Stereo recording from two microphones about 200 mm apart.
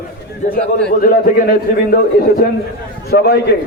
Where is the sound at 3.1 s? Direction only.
50° left (ahead or behind).